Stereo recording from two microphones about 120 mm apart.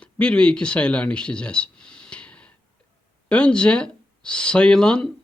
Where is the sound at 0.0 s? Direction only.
10° left (ahead or behind).